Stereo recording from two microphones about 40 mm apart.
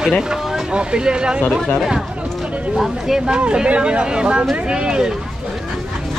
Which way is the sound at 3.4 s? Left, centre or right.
Right.